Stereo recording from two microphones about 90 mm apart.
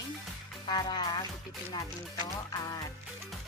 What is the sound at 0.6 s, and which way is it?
Speech, 50° left (ahead or behind).